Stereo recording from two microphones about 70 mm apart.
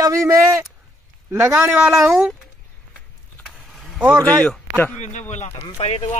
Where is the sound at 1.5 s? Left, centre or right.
Right.